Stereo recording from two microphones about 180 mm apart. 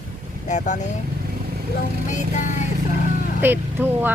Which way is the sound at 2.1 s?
40° left (ahead or behind).